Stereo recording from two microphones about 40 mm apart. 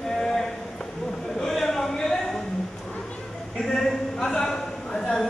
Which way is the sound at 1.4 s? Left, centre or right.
Centre.